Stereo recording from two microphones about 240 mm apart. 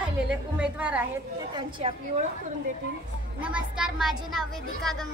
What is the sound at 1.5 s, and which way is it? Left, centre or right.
Speech, right.